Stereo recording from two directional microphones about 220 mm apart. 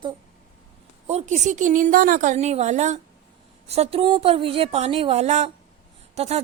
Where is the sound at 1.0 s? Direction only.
30° right (ahead or behind).